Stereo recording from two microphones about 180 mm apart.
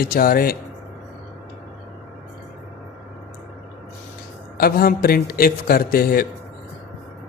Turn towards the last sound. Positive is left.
turn(degrees=55)  # may be behind; listen again after turning